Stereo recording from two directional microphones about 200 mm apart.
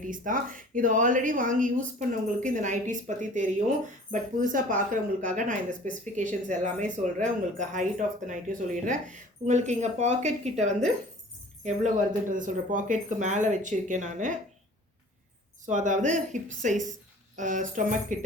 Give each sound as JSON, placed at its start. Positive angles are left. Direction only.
{"t": 0.1, "sound": "speech", "side_deg": -40}
{"t": 12.3, "sound": "speech", "side_deg": -40}
{"t": 15.6, "sound": "speech", "side_deg": -40}